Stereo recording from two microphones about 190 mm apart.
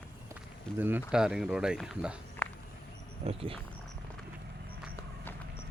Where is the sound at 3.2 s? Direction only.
30° right (ahead or behind).